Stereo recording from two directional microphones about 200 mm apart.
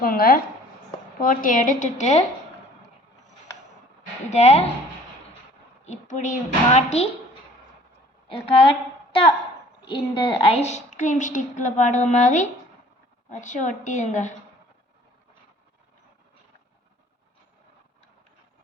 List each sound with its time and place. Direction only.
0.0 s a woman's voice: 45° left (ahead or behind)
4.3 s a woman's voice: 35° left (ahead or behind)
5.8 s a woman's voice: 35° left (ahead or behind)
8.3 s a woman's voice: 25° left (ahead or behind)
9.8 s a woman's voice: 25° left (ahead or behind)